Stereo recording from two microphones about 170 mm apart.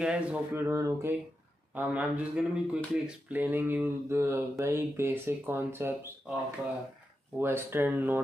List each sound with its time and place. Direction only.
0.0 s speech: 5° right (ahead or behind)
7.3 s speech: 15° right (ahead or behind)